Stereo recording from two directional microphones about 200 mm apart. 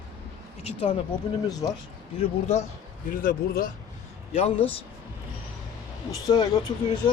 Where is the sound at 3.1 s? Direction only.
45° left (ahead or behind).